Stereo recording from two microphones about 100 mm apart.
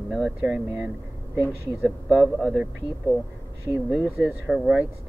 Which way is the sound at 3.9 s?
20° right (ahead or behind).